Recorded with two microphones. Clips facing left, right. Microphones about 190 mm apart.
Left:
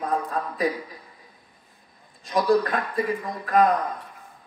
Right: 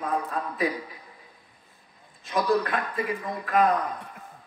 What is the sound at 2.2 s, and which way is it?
Speech, 35° left (ahead or behind).